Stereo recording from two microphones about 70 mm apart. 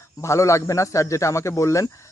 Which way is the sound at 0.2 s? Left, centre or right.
Left.